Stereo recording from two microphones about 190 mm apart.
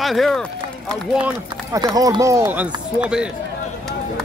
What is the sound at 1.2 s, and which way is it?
Speech, 20° right (ahead or behind).